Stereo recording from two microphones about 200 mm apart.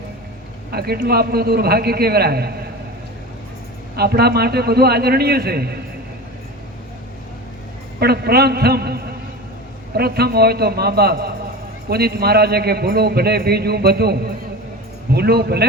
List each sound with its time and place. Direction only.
0.7 s a man's voice: 50° right (ahead or behind)
3.9 s a man's voice: 50° right (ahead or behind)
7.9 s a man's voice: 50° right (ahead or behind)
10.0 s a man's voice: 50° right (ahead or behind)